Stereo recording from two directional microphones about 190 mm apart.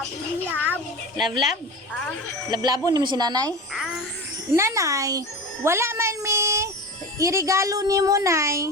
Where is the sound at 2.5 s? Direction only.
20° right (ahead or behind).